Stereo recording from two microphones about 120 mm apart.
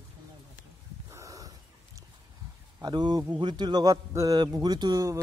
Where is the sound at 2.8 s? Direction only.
35° right (ahead or behind).